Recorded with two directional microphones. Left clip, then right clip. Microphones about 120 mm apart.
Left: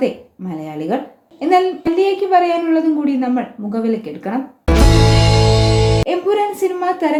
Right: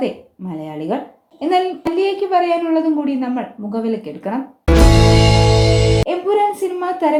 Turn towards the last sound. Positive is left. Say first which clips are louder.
# left 1 dB
turn(degrees=-35)  # may be behind; listen again after turning